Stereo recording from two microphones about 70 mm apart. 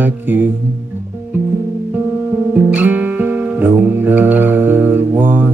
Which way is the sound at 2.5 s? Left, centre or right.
Right.